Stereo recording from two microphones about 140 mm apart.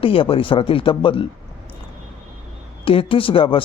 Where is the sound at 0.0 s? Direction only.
40° left (ahead or behind).